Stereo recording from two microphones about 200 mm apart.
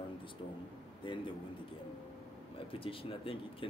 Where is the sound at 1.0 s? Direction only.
25° left (ahead or behind).